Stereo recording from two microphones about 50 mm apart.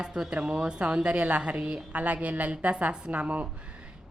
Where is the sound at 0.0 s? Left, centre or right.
Centre.